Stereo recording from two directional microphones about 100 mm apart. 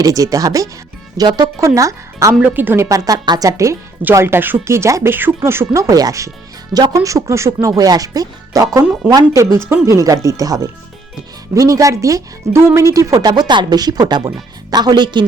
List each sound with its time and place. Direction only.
0.0 s speech: 35° right (ahead or behind)
2.4 s speech: 20° right (ahead or behind)
2.9 s speech: 35° right (ahead or behind); by 15.3 s 50° right (ahead or behind)